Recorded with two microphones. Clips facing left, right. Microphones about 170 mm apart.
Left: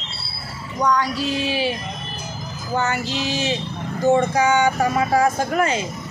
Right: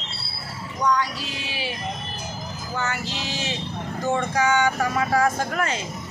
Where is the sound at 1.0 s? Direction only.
30° left (ahead or behind).